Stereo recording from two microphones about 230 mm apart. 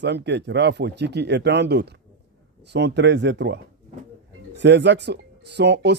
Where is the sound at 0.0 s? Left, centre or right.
Right.